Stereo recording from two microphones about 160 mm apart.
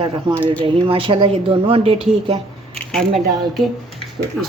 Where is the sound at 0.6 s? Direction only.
35° right (ahead or behind).